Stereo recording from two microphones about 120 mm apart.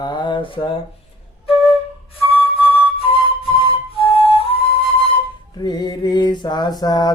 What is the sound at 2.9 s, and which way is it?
Music, 55° left (ahead or behind).